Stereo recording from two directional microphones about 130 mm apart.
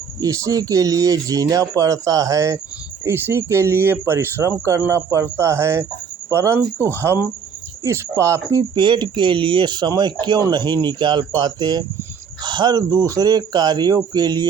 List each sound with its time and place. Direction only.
0.2 s speech: 25° right (ahead or behind)